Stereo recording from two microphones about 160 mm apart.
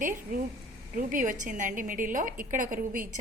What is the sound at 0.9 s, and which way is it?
A woman's voice, 55° right (ahead or behind).